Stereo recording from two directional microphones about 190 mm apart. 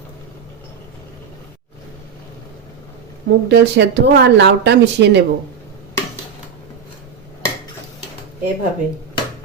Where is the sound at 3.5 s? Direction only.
60° right (ahead or behind).